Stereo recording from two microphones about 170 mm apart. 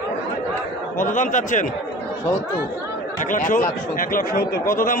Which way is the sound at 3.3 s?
50° left (ahead or behind).